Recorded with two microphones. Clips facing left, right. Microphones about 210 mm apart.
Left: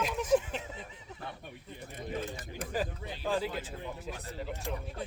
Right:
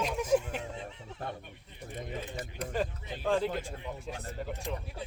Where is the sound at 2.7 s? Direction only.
5° left (ahead or behind).